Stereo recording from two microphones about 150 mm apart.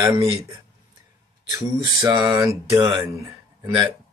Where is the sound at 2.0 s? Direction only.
25° right (ahead or behind).